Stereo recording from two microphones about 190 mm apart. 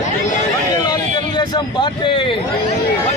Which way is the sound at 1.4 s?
25° left (ahead or behind).